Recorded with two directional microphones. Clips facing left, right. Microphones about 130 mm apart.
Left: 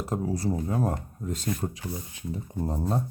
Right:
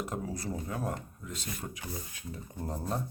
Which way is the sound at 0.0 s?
35° left (ahead or behind).